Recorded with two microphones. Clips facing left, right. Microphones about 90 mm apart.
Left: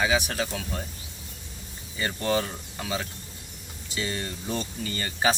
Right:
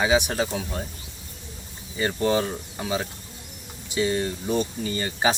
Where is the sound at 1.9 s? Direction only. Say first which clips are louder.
Right 4 dB; 20° right (ahead or behind).